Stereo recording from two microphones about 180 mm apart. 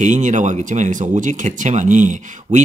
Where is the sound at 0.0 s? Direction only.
45° right (ahead or behind).